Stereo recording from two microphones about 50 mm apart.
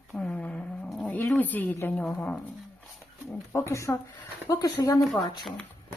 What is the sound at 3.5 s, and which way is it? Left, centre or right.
Speech, left.